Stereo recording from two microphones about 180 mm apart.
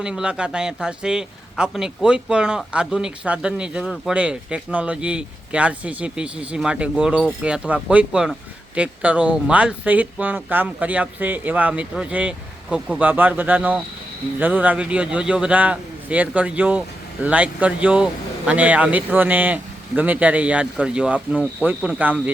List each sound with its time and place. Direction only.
0.0 s a man's voice: 5° right (ahead or behind)